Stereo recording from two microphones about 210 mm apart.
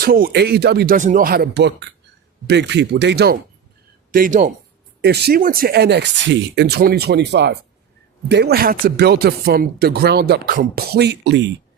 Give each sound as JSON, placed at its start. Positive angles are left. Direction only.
{"t": 0.0, "sound": "speech", "side_deg": -45}
{"t": 4.1, "sound": "speech", "side_deg": -40}
{"t": 4.9, "sound": "speech", "side_deg": -50}